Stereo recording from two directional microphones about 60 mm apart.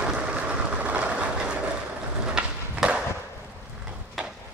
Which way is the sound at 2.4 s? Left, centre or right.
Centre.